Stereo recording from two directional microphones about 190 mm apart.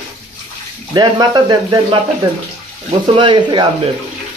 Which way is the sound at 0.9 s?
20° right (ahead or behind).